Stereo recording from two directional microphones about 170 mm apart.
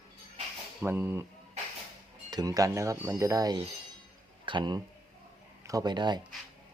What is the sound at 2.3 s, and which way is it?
Speech, 20° right (ahead or behind).